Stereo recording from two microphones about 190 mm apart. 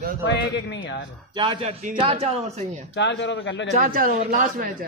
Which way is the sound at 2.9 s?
65° left (ahead or behind).